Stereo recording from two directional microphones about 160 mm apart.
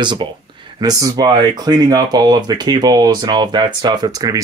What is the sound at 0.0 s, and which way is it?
Speech, 30° right (ahead or behind).